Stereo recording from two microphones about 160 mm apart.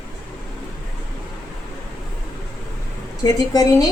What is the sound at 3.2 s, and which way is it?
Speech, 25° left (ahead or behind).